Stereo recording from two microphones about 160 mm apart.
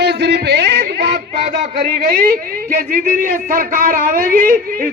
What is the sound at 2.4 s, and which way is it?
A man's voice, 60° right (ahead or behind).